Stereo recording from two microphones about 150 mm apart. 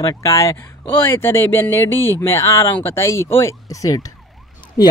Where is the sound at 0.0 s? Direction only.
20° left (ahead or behind).